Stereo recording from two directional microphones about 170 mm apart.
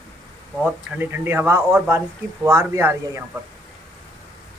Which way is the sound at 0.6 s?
10° right (ahead or behind).